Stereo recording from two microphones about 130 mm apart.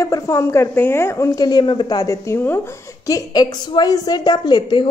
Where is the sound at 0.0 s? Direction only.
25° left (ahead or behind).